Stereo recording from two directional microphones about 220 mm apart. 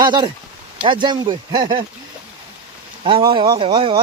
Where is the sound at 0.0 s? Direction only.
20° right (ahead or behind).